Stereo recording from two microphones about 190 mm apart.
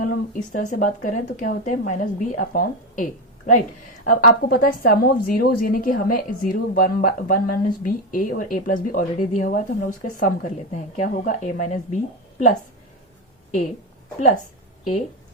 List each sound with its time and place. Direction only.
0.5 s a woman's voice: 40° left (ahead or behind)